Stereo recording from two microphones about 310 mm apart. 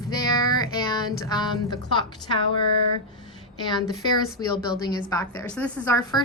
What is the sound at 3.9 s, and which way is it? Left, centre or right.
A woman's voice, centre.